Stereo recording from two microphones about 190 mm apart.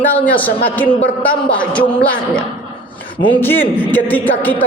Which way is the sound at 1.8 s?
25° left (ahead or behind).